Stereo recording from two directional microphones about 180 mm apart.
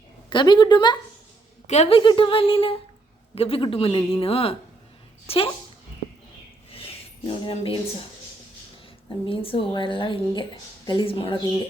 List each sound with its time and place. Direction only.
0.3 s a woman's voice: 25° left (ahead or behind)
1.6 s a woman's voice: 40° left (ahead or behind)
7.3 s a woman's voice: 30° left (ahead or behind)
9.2 s a woman's voice: 30° left (ahead or behind)